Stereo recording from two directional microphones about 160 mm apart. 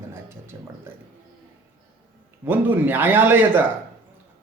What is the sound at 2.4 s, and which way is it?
A man's voice, 10° right (ahead or behind).